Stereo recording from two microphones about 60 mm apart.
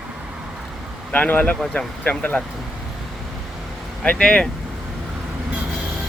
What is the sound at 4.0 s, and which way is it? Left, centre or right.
Speech, centre.